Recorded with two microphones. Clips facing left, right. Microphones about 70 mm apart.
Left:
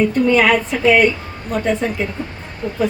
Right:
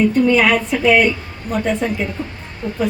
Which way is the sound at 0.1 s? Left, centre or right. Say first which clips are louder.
Even; centre.